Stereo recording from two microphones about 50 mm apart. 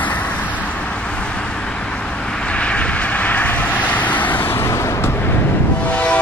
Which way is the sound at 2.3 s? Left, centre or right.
Left.